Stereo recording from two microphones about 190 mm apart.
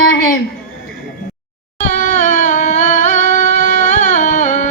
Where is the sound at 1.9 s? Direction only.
40° left (ahead or behind).